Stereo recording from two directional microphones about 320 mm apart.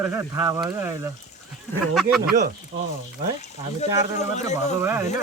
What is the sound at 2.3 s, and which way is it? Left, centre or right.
Speech, right.